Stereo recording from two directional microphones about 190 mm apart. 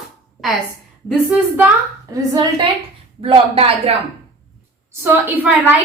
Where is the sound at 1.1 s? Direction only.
5° right (ahead or behind).